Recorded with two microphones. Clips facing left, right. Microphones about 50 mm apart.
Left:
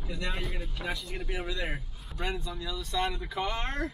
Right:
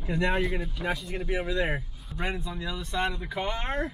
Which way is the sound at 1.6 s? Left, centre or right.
Right.